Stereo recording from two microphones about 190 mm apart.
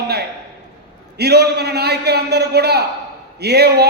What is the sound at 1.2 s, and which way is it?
A man's voice, 60° right (ahead or behind).